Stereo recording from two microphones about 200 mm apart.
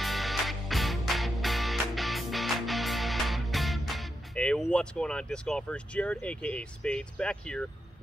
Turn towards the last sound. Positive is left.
turn(degrees=5)  # may be behind; listen again after turning